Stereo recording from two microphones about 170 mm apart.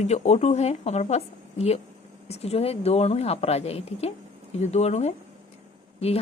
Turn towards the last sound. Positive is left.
turn(degrees=35)  # may be behind; listen again after turning